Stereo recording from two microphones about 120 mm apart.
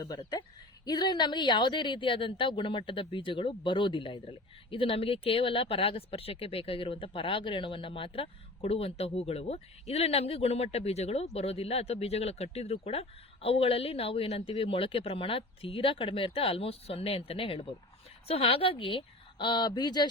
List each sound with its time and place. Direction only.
0.0 s a woman's voice: 35° left (ahead or behind)